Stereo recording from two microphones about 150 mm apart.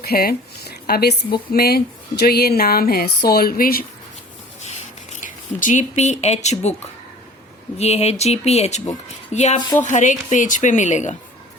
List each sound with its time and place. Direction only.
0.0 s speech: 90° left
5.2 s speech: 60° left (ahead or behind)
7.8 s speech: 45° left (ahead or behind)